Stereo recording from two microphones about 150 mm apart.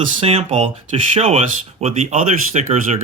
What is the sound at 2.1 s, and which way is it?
Speech, 50° right (ahead or behind).